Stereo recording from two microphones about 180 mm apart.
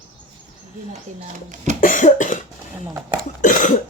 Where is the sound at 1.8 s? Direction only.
45° left (ahead or behind).